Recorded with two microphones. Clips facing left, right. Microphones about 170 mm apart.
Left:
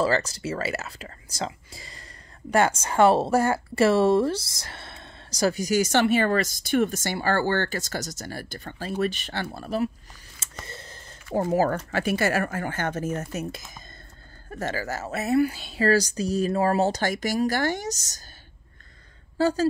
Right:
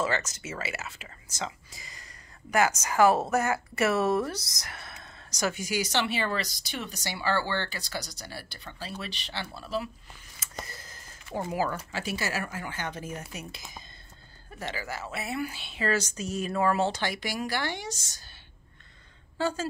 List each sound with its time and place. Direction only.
0.0 s a woman's voice: 35° left (ahead or behind); by 9.8 s 50° left (ahead or behind)
10.4 s a sound: 30° left (ahead or behind)
11.3 s a woman's voice: 50° left (ahead or behind)
19.3 s a woman's voice: 40° left (ahead or behind)